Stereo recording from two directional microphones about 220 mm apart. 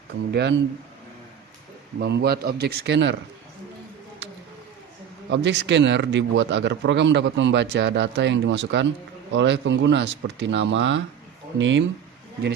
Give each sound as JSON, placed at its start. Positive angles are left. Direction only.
{"t": 2.0, "sound": "a man's voice", "side_deg": -50}
{"t": 5.3, "sound": "a man's voice", "side_deg": -50}